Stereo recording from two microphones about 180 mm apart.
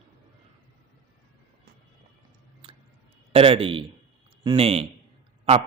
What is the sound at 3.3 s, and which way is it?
A man's voice, 30° right (ahead or behind).